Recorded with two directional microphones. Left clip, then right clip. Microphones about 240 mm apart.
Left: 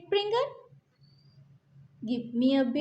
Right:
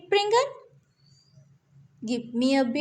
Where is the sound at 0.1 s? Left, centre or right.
Right.